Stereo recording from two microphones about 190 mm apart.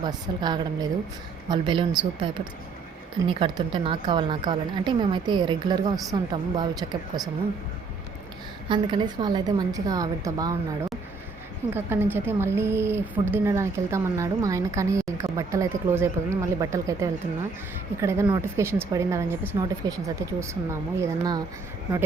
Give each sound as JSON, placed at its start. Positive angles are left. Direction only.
{"t": 0.0, "sound": "a woman's voice", "side_deg": -20}
{"t": 8.7, "sound": "a woman's voice", "side_deg": -25}